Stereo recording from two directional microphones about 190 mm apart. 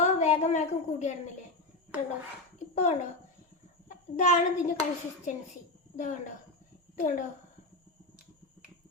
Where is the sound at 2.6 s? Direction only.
35° left (ahead or behind).